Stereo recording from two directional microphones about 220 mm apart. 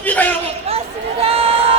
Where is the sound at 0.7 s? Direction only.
25° right (ahead or behind).